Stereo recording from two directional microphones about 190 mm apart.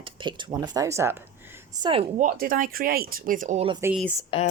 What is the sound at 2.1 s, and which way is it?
Speech, 45° right (ahead or behind).